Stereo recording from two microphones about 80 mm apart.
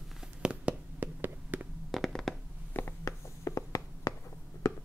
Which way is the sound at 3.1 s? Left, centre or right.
Left.